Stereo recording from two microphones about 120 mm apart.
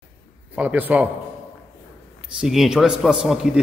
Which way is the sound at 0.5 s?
15° right (ahead or behind).